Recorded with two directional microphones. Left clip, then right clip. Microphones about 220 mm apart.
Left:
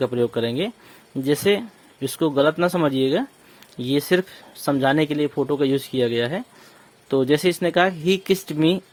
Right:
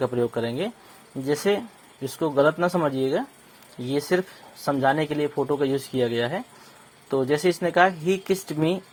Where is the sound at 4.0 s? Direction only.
55° left (ahead or behind).